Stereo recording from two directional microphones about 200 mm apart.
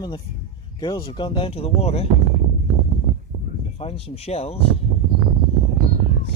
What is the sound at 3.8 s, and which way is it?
Speech, 30° left (ahead or behind).